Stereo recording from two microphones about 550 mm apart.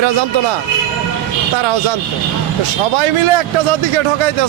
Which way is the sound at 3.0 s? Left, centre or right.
Right.